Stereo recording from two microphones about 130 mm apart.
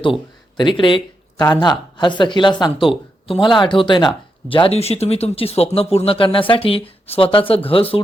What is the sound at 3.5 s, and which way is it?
Speech, 40° left (ahead or behind).